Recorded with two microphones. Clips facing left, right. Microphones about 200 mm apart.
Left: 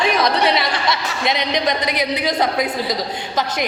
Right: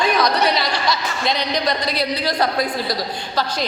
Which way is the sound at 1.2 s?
20° left (ahead or behind).